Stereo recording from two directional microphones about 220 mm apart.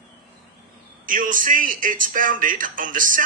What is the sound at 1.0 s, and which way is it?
Speech, 40° right (ahead or behind).